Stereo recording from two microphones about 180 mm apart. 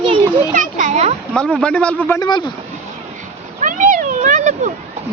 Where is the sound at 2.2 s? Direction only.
25° left (ahead or behind).